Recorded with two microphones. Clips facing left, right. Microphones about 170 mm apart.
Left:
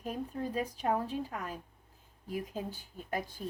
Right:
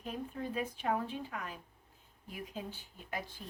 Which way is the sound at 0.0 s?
40° left (ahead or behind).